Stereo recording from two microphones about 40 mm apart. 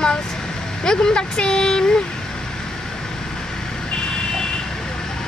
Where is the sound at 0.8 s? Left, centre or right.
Centre.